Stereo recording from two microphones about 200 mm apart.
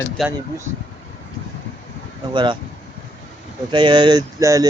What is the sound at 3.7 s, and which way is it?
Speech, 25° right (ahead or behind).